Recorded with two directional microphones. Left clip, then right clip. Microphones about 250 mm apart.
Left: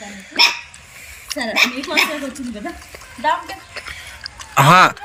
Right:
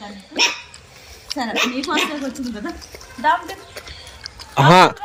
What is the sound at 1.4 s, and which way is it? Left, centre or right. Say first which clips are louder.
Speech: left 4 dB; centre.